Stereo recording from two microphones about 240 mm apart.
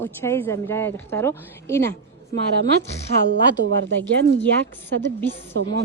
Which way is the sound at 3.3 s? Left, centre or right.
Right.